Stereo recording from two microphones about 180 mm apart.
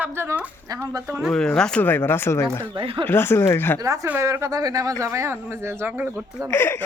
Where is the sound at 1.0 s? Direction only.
Centre (ahead or behind); by 2.7 s 15° left (ahead or behind).